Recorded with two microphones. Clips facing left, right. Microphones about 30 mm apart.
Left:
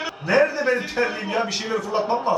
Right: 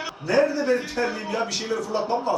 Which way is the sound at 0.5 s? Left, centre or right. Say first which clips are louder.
Left 1 dB; left.